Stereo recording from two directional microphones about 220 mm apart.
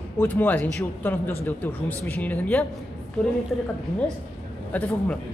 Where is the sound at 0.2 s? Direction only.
10° left (ahead or behind).